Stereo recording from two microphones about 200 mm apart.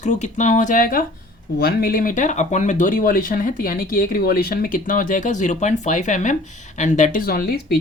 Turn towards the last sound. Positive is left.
turn(degrees=50)  # may be behind; listen again after turning